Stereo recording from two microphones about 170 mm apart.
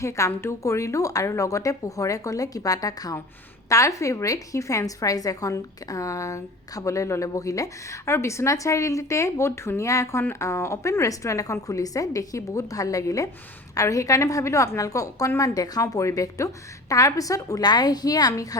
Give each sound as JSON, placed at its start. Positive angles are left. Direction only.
{"t": 0.0, "sound": "a woman's voice", "side_deg": 20}